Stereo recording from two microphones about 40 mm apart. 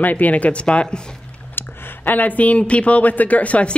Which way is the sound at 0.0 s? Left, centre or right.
Left.